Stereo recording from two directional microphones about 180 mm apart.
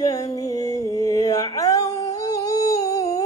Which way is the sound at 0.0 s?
20° left (ahead or behind).